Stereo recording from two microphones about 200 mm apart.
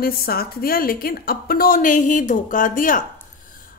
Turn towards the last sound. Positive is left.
turn(degrees=40)  # may be behind; listen again after turning